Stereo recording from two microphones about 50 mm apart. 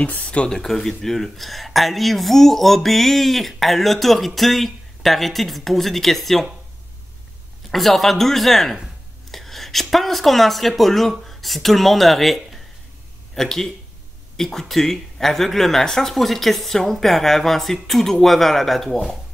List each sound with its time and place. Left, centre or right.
0.0 s speech: left
0.5 s speech: centre
7.7 s speech: centre
9.3 s a sound: centre
10.7 s speech: centre